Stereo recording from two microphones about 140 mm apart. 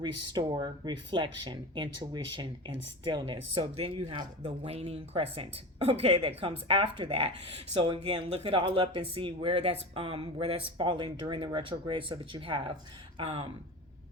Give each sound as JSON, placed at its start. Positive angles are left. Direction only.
{"t": 0.0, "sound": "speech", "side_deg": -30}